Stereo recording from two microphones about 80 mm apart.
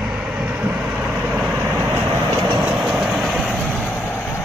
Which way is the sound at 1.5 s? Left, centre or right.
Right.